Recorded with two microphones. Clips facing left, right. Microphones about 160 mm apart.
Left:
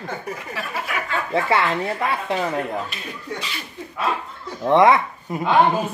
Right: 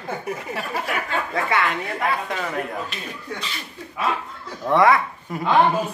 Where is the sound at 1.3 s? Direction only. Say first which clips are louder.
Left 4 dB; 30° left (ahead or behind).